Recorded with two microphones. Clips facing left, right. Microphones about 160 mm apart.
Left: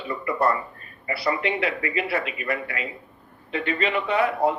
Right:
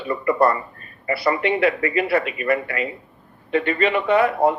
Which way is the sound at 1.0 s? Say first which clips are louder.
Right 5 dB; 55° right (ahead or behind).